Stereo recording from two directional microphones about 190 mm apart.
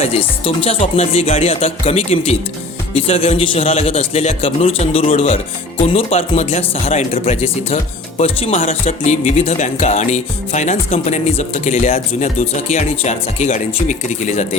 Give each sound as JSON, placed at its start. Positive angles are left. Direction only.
{"t": 0.0, "sound": "speech", "side_deg": 30}